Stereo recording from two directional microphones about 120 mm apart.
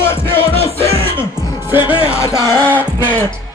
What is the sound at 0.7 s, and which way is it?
Music, 55° right (ahead or behind).